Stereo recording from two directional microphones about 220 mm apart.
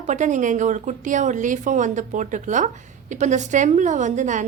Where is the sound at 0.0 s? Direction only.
35° right (ahead or behind).